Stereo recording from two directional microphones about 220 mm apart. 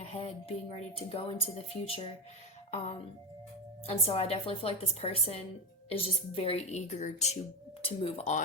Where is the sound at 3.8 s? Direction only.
25° left (ahead or behind).